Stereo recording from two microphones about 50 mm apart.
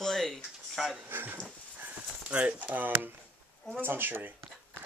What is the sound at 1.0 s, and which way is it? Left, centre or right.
Speech, right.